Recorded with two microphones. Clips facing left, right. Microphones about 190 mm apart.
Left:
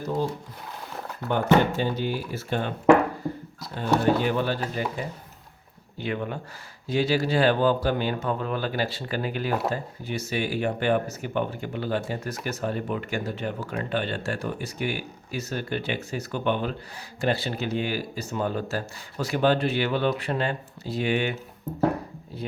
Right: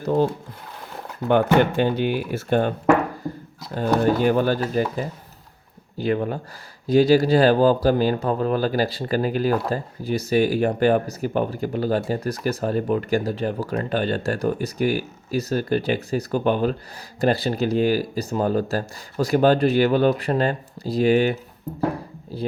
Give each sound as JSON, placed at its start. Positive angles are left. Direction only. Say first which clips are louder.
{"t": 0.0, "sound": "speech", "louder": "right 7 dB", "side_deg": -65}
{"t": 1.3, "sound": "speech", "louder": "right 4 dB", "side_deg": -65}
{"t": 2.5, "sound": "speech", "louder": "right 1 dB", "side_deg": -45}